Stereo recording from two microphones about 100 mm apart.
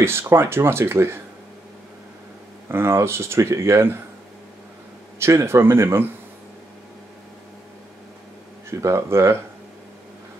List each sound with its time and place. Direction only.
0.0 s speech: 25° right (ahead or behind)
2.7 s speech: 25° right (ahead or behind)
5.2 s speech: 25° right (ahead or behind)
8.6 s speech: 25° right (ahead or behind)